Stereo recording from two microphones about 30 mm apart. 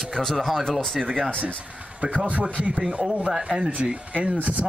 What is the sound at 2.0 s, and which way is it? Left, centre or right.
Speech, right.